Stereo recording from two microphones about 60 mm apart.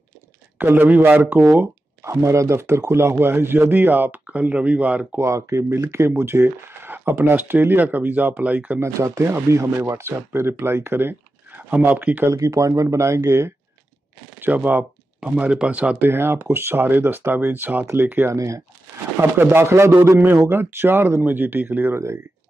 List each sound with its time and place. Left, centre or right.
0.6 s speech: right
2.0 s speech: right
5.2 s speech: right
8.7 s speech: right
11.9 s speech: right
12.3 s speech: right
14.4 s speech: right
16.0 s speech: right
18.3 s speech: right
19.1 s speech: right
19.6 s speech: right